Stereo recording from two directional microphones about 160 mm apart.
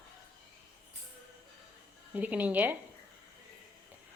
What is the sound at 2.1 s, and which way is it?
Speech, 10° right (ahead or behind).